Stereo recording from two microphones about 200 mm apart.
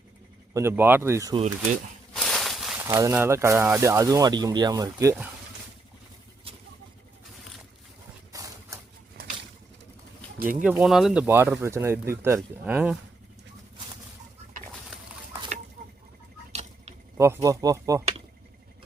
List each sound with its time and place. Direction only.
0.5 s speech: 10° right (ahead or behind)
2.1 s a sound: centre (ahead or behind)
2.9 s speech: 15° right (ahead or behind)
8.3 s typewriter: 15° right (ahead or behind)
9.2 s bird: 55° right (ahead or behind)
10.5 s speech: 5° right (ahead or behind)
15.8 s a sound: 45° right (ahead or behind)
16.5 s drip: 35° right (ahead or behind)
17.2 s speech: 15° right (ahead or behind)